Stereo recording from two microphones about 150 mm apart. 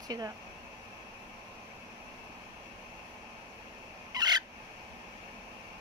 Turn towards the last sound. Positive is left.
turn(degrees=-25)  # may be behind; listen again after turning